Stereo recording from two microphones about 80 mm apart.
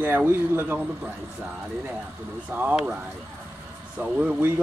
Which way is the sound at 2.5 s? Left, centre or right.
Right.